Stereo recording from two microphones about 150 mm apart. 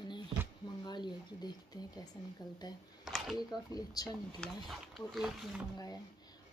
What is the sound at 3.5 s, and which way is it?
Speech, 25° left (ahead or behind).